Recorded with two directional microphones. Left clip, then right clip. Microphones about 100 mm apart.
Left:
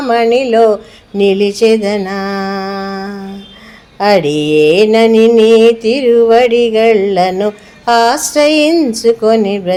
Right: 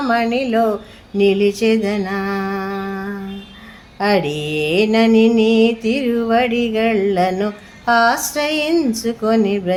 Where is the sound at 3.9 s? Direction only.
45° left (ahead or behind).